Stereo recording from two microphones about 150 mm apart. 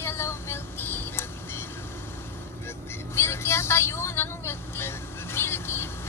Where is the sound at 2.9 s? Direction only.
15° left (ahead or behind).